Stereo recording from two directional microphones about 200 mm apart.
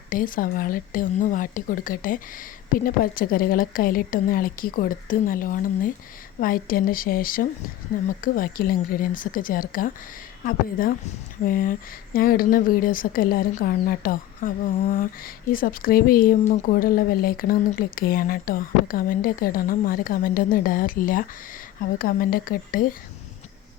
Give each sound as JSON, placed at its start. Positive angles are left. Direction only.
{"t": 0.1, "sound": "speech", "side_deg": 45}